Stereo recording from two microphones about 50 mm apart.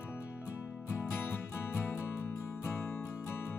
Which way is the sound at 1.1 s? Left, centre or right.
Left.